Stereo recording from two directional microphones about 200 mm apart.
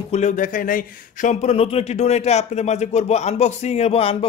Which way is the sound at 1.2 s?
30° left (ahead or behind).